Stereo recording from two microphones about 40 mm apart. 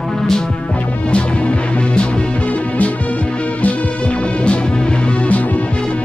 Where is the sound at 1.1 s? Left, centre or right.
Left.